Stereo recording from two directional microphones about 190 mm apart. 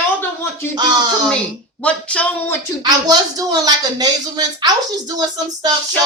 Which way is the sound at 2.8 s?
20° right (ahead or behind).